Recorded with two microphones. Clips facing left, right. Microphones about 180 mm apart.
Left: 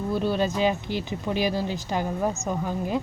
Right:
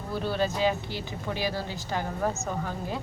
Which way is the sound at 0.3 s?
20° left (ahead or behind).